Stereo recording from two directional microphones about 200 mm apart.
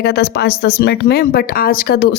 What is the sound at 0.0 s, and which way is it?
Speech, 55° left (ahead or behind).